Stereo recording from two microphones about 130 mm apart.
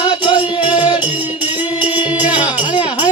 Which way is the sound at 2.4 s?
35° left (ahead or behind).